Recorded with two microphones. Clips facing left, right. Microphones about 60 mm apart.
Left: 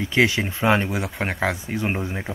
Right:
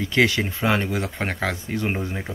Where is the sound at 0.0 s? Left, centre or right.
Centre.